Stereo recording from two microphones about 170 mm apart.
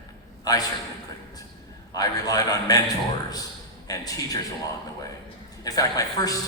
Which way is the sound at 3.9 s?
20° left (ahead or behind).